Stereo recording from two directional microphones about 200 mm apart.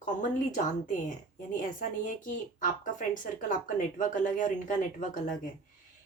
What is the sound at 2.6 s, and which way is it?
A woman's voice, 40° left (ahead or behind).